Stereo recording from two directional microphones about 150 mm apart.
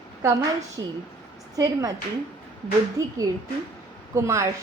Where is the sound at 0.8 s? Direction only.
25° right (ahead or behind).